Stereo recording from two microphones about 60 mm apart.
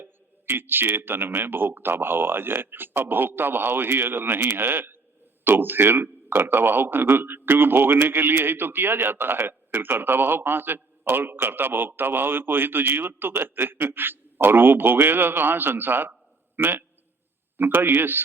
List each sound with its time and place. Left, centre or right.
0.0 s a man's voice: right